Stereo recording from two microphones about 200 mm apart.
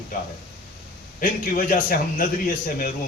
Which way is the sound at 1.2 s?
45° left (ahead or behind).